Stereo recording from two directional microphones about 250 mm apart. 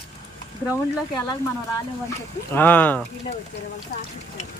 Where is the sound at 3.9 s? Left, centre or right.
Left.